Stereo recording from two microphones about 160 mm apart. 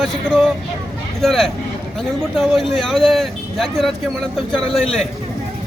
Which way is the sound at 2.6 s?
Centre (ahead or behind).